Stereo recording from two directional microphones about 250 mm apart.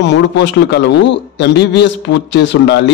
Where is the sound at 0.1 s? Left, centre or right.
Left.